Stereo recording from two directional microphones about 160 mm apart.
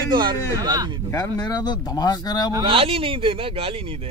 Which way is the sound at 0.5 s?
25° right (ahead or behind).